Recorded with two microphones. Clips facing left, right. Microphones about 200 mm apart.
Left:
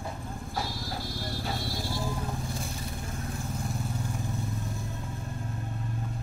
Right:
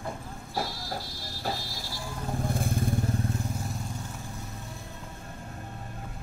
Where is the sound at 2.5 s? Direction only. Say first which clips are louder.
Right 7 dB; 55° right (ahead or behind).